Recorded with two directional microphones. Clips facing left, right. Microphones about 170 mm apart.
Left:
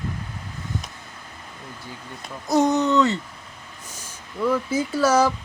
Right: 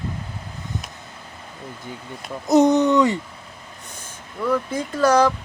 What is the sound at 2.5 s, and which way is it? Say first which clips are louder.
Speech: right 4 dB; 20° right (ahead or behind).